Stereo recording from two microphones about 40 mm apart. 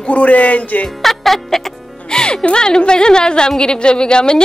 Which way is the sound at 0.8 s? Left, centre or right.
Centre.